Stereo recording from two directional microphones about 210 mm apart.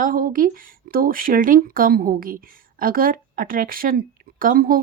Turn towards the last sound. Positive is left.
turn(degrees=-45)  # may be behind; listen again after turning